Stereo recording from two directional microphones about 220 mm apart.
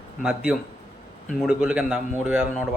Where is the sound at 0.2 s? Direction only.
5° right (ahead or behind).